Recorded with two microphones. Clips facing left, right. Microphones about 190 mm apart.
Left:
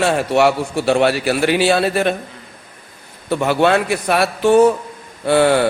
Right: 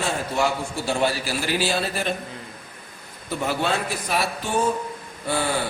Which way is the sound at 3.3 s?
70° left (ahead or behind).